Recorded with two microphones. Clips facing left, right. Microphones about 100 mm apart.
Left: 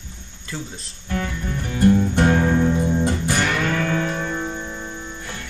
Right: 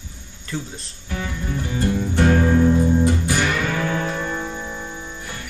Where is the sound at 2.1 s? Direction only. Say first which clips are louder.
Even; 20° left (ahead or behind).